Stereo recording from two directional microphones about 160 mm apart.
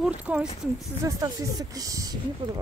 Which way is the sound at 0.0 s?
5° right (ahead or behind).